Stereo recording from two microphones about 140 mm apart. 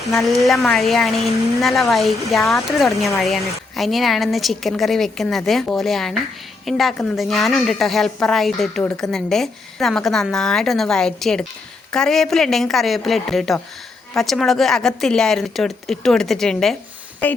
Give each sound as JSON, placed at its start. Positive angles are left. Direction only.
{"t": 0.1, "sound": "speech", "side_deg": 0}